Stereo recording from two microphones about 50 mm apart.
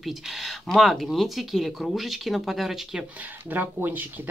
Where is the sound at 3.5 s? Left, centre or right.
Right.